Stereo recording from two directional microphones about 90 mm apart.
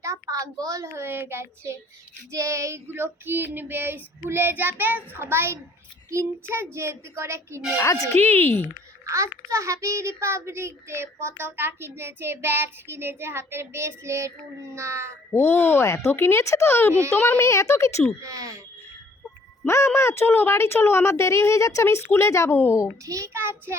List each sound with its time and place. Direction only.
0.0 s a child's voice: 35° right (ahead or behind)
7.8 s a woman's voice: 35° left (ahead or behind)
8.2 s speech: 25° left (ahead or behind)
9.0 s a child's voice: 35° right (ahead or behind)
15.3 s speech: 25° left (ahead or behind)
16.9 s a woman's voice: 30° right (ahead or behind)
17.2 s a woman's voice: 25° left (ahead or behind)
18.2 s a woman's voice: 40° right (ahead or behind)
19.6 s a woman's voice: 30° left (ahead or behind)
23.0 s a child's voice: 35° right (ahead or behind)